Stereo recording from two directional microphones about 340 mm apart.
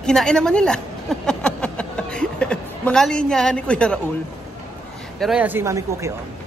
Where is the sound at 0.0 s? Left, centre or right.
Centre.